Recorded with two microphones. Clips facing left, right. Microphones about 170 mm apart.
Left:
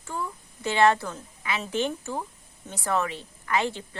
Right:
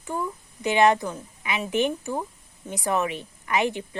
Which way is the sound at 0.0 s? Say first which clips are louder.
Right 4 dB; 15° right (ahead or behind).